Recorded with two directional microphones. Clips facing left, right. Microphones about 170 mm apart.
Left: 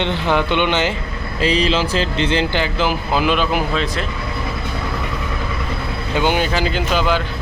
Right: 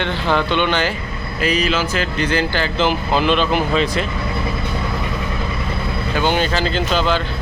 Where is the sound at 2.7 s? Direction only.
5° left (ahead or behind).